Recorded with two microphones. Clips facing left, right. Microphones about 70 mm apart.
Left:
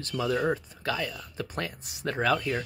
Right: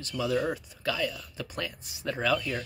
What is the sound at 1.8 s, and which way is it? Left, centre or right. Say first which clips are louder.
Speech: left 1 dB; left.